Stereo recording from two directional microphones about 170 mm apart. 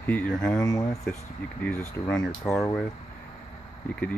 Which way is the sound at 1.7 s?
10° left (ahead or behind).